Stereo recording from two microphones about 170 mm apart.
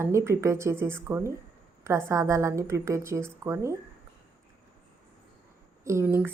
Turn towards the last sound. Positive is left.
turn(degrees=-15)  # may be behind; listen again after turning